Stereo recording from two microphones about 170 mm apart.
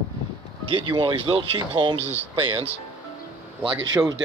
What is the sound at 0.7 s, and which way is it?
Speech, 30° right (ahead or behind).